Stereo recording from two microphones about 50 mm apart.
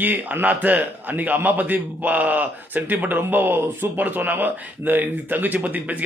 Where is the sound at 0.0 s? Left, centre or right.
Right.